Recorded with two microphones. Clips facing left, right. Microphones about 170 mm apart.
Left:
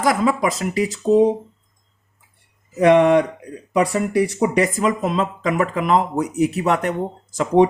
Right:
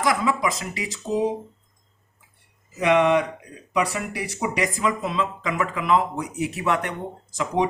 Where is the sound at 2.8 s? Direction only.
40° left (ahead or behind).